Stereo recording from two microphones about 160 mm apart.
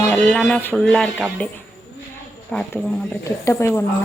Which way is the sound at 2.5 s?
10° left (ahead or behind).